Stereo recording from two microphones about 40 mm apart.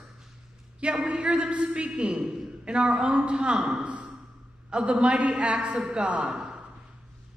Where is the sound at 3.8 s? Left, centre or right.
Right.